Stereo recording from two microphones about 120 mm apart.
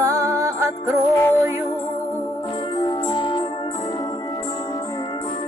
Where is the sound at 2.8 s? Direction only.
40° left (ahead or behind).